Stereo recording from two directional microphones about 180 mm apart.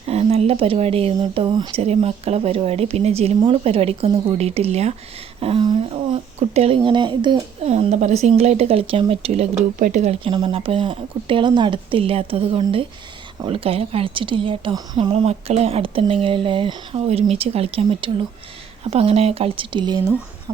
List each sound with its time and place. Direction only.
0.1 s speech: 35° right (ahead or behind)
1.8 s speech: 35° right (ahead or behind)
7.6 s speech: 35° right (ahead or behind)